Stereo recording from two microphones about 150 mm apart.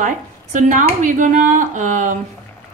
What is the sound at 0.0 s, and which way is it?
Speech, 55° right (ahead or behind).